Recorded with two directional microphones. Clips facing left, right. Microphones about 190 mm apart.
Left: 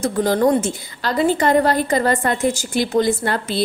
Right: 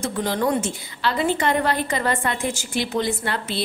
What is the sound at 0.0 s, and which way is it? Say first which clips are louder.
A woman's voice: left 6 dB; 40° left (ahead or behind).